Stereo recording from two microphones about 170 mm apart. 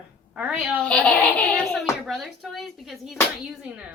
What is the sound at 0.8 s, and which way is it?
A child's voice, 5° left (ahead or behind).